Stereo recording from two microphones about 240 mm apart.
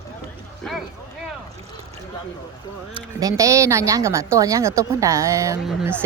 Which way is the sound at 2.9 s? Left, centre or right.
Centre.